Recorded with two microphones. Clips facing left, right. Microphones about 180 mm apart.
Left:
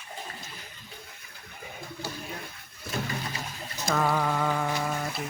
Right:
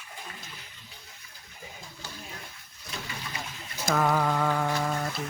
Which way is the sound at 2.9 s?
50° left (ahead or behind).